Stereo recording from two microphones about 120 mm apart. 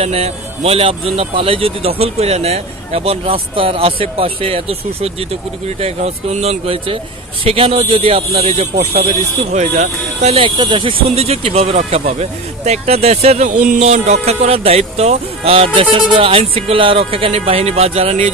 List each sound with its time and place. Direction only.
0.0 s speech: 60° right (ahead or behind)
10.4 s speech: 35° right (ahead or behind)
11.1 s speech: 60° right (ahead or behind)